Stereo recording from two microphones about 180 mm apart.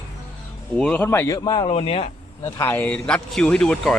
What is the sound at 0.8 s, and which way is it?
Speech, 5° left (ahead or behind).